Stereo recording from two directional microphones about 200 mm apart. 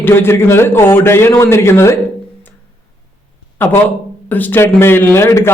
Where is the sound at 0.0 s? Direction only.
10° left (ahead or behind).